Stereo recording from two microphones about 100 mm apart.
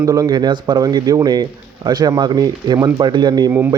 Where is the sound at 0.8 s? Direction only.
40° right (ahead or behind).